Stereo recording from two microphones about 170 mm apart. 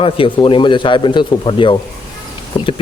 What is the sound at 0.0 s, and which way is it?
Speech, 30° left (ahead or behind).